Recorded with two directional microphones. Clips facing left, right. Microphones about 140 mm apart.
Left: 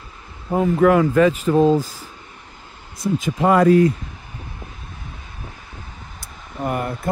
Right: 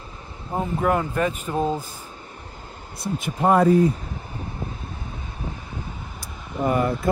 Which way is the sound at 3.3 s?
85° left.